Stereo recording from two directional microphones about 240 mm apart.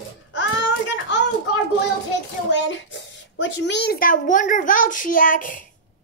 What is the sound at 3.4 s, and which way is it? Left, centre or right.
A child's voice, left.